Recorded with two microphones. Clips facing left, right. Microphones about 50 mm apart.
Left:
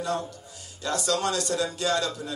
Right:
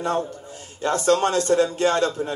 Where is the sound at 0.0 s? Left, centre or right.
Right.